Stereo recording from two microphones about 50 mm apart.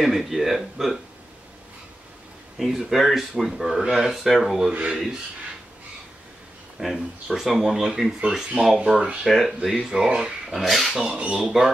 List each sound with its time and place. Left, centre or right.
0.0 s speech: centre
2.6 s speech: centre
6.8 s speech: centre
8.7 s speech: centre
9.2 s speech: centre
9.8 s speech: centre
10.5 s speech: centre
11.1 s speech: right
11.4 s speech: centre